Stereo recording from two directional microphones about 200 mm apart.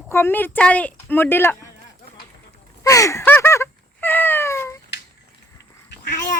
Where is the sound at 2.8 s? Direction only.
15° left (ahead or behind).